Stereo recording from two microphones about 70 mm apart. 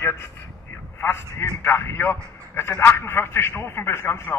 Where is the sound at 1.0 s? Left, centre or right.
Left.